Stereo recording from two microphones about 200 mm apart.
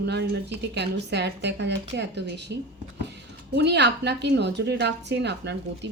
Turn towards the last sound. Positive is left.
turn(degrees=-55)  # may be behind; listen again after turning